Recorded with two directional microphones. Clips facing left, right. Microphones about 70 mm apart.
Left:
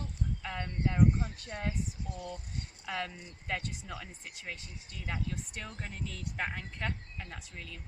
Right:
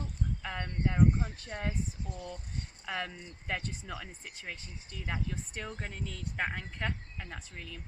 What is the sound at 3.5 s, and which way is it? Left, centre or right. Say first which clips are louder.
Speech: even; right.